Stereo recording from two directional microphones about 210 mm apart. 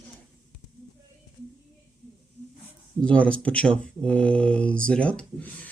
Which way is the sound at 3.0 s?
5° left (ahead or behind).